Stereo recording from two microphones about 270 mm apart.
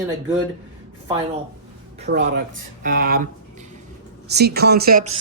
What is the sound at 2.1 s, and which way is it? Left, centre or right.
Speech, right.